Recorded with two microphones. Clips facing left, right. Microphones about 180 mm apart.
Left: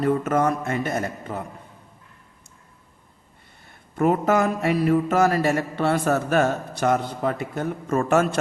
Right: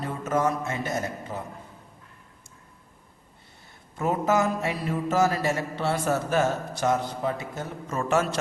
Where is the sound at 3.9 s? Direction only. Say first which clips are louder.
Left 4 dB; 65° left (ahead or behind).